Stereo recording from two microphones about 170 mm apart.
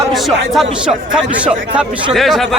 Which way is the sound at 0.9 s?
5° right (ahead or behind).